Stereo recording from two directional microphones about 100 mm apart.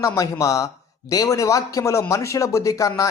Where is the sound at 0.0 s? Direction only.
35° left (ahead or behind).